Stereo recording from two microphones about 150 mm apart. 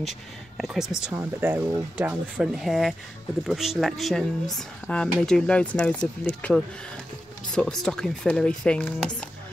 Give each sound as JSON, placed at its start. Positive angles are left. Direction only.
{"t": 0.6, "sound": "speech", "side_deg": -5}
{"t": 1.1, "sound": "speech", "side_deg": -15}